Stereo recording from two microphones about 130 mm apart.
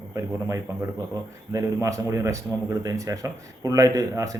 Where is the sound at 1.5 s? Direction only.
25° right (ahead or behind).